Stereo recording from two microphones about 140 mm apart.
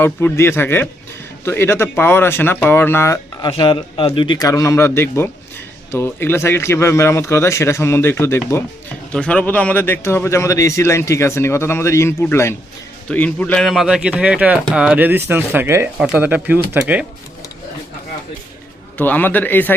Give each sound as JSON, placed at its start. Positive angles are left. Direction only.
{"t": 0.0, "sound": "speech", "side_deg": 15}
{"t": 3.4, "sound": "speech", "side_deg": 35}
{"t": 13.7, "sound": "speech", "side_deg": -5}
{"t": 18.9, "sound": "speech", "side_deg": 10}